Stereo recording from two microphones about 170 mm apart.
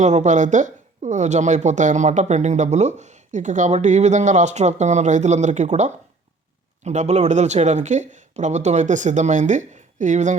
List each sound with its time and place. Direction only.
0.0 s speech: 45° right (ahead or behind)